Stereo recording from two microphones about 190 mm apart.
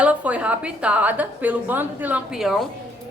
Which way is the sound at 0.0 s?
5° right (ahead or behind).